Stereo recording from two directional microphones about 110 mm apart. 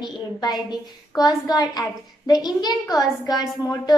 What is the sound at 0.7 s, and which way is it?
A woman's voice, 40° left (ahead or behind).